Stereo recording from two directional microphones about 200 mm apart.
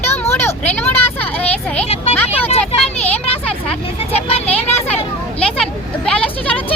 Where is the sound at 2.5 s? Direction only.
30° left (ahead or behind).